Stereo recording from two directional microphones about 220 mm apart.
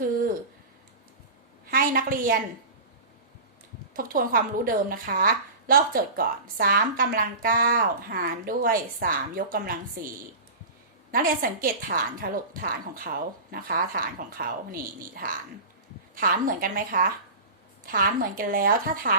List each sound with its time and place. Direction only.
1.6 s a sound: 40° right (ahead or behind)
3.9 s a woman's voice: 40° right (ahead or behind)
11.1 s a woman's voice: 40° right (ahead or behind)